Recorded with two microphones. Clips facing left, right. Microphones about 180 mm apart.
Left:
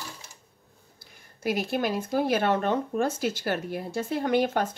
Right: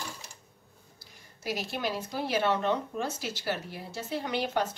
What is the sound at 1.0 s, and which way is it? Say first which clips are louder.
Speech: left 7 dB; 55° left (ahead or behind).